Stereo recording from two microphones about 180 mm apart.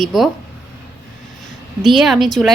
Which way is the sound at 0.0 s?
Centre (ahead or behind).